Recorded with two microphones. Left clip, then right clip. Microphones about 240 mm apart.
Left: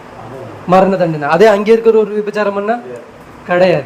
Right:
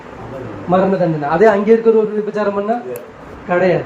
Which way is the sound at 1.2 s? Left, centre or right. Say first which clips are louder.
Left 4 dB; left.